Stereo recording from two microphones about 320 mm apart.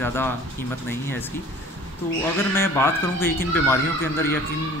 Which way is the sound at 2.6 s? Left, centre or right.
Centre.